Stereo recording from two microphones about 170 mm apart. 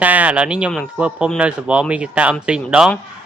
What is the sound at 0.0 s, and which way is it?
A man's voice, 10° right (ahead or behind).